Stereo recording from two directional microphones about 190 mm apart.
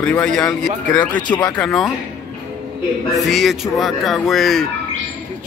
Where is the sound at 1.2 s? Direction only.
20° left (ahead or behind).